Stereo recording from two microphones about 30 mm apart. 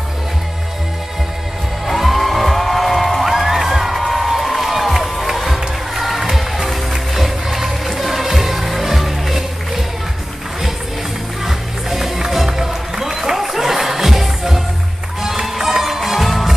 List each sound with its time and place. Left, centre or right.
1.9 s music: centre
3.3 s music: centre
11.4 s music: centre